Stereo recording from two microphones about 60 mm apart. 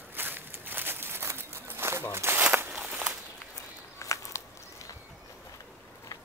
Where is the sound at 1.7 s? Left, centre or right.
Right.